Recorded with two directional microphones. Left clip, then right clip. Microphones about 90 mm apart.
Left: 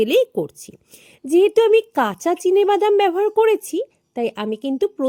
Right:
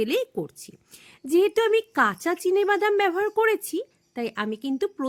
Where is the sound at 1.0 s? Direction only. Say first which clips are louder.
Left 6 dB; 35° left (ahead or behind).